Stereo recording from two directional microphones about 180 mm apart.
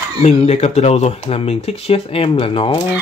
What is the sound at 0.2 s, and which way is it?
Speech, 35° left (ahead or behind).